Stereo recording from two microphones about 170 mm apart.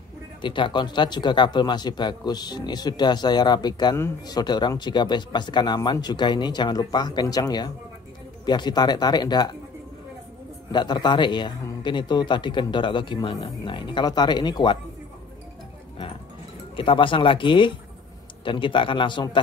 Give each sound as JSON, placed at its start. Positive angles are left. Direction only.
{"t": 0.4, "sound": "speech", "side_deg": 30}
{"t": 10.7, "sound": "speech", "side_deg": 25}
{"t": 16.7, "sound": "speech", "side_deg": 30}